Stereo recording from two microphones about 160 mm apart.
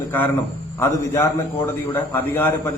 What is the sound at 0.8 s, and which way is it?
A man's voice, 15° left (ahead or behind).